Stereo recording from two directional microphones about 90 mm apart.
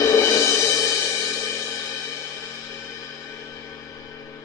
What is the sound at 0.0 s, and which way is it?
Music, 35° left (ahead or behind).